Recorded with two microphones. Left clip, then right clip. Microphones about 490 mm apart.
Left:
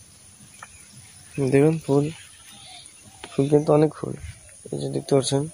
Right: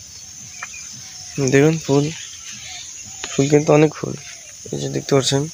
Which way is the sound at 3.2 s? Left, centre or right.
Left.